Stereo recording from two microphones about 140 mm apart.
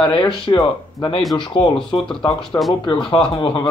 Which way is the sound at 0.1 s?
35° left (ahead or behind).